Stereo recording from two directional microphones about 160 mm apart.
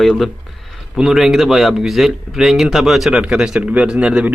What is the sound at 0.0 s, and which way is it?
A man's voice, centre (ahead or behind).